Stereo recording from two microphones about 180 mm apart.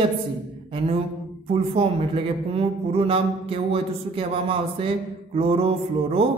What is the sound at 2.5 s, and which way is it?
A man's voice, 30° right (ahead or behind).